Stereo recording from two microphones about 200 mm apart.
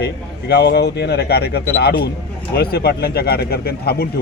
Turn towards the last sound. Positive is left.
turn(degrees=50)  # may be behind; listen again after turning